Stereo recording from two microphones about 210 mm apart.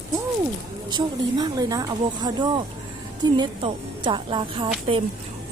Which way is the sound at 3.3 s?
20° right (ahead or behind).